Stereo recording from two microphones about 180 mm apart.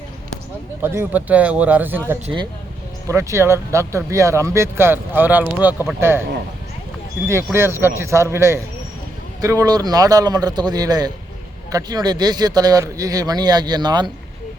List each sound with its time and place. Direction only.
0.8 s speech: 10° right (ahead or behind)
2.2 s speech: 25° right (ahead or behind)
3.1 s speech: 15° right (ahead or behind)
7.3 s speech: 15° right (ahead or behind)